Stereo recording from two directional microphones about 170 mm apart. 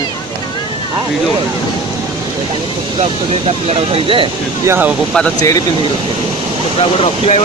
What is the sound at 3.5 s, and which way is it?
Speech, 35° right (ahead or behind).